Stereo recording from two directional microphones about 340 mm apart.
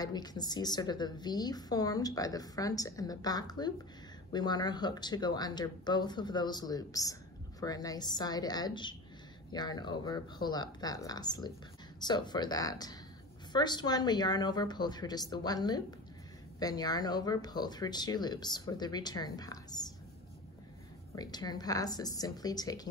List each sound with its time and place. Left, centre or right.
0.0 s a woman's voice: centre
21.1 s a woman's voice: centre